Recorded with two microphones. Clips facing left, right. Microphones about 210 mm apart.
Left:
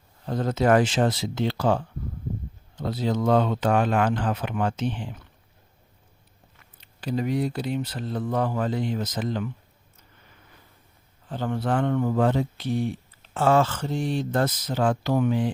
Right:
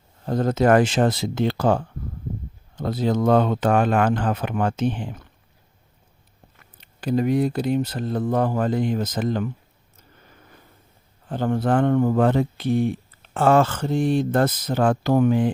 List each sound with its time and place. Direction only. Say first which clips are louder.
0.3 s speech: right 3 dB; 45° right (ahead or behind)
7.0 s speech: right 5 dB; 50° right (ahead or behind)
11.3 s speech: right 5 dB; 50° right (ahead or behind)